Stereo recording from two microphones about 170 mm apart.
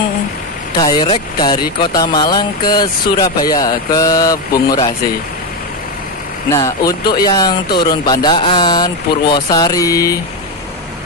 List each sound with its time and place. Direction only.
0.7 s speech: 25° left (ahead or behind)
6.5 s speech: 20° left (ahead or behind)